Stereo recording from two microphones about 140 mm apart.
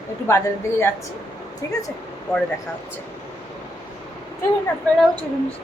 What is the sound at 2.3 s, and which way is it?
Speech, 5° left (ahead or behind).